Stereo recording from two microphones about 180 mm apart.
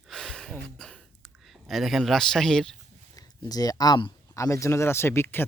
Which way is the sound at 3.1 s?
20° left (ahead or behind).